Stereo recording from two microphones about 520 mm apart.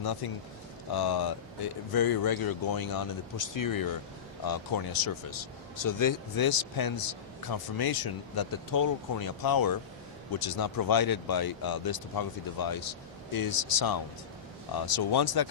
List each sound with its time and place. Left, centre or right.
0.0 s speech: left